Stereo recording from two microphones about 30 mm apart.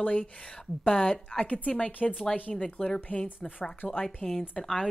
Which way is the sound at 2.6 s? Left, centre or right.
Left.